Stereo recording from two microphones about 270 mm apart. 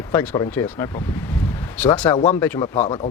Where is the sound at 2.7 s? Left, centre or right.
Left.